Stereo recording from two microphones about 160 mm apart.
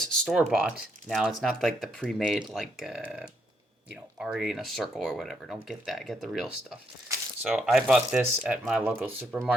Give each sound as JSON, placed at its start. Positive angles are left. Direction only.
{"t": 0.0, "sound": "speech", "side_deg": 0}